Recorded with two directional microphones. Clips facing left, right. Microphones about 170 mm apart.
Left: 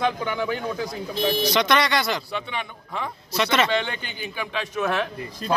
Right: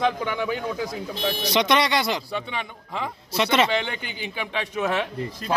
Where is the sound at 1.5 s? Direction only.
20° right (ahead or behind).